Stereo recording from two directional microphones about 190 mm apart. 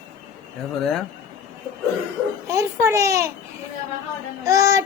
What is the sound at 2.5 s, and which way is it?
Child singing, 15° right (ahead or behind).